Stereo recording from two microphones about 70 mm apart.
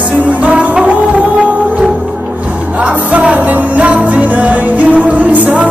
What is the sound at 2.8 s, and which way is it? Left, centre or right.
Music, centre.